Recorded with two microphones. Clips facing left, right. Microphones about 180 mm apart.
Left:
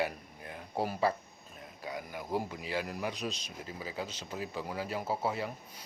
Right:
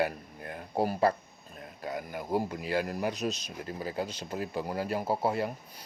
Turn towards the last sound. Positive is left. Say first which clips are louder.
# right 4 dB
turn(degrees=-50)  # may be behind; listen again after turning